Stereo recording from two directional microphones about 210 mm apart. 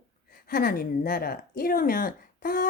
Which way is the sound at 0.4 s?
45° left (ahead or behind).